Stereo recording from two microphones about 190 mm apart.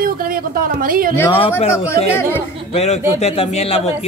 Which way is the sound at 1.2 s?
30° left (ahead or behind).